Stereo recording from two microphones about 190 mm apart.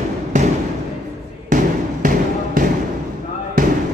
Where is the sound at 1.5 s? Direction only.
45° right (ahead or behind).